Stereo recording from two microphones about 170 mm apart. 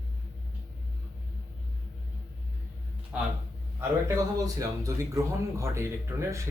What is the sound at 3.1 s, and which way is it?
A man's voice, 10° right (ahead or behind).